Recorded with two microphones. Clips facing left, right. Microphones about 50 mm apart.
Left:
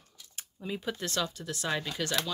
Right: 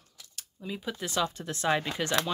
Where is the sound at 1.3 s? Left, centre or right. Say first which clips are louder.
Right 5 dB; right.